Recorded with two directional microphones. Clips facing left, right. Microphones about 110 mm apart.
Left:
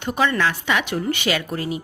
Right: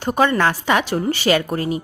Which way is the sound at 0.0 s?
40° right (ahead or behind).